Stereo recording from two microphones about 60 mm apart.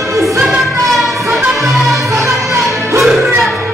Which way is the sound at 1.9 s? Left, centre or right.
Right.